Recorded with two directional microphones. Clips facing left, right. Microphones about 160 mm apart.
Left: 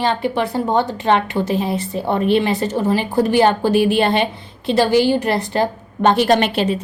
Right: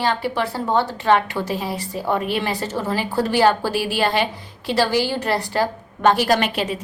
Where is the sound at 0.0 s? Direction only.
20° left (ahead or behind).